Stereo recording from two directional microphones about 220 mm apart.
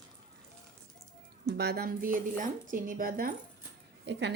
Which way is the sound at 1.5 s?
50° right (ahead or behind).